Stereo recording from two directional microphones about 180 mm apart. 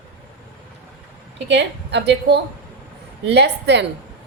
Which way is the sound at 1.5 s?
70° right (ahead or behind).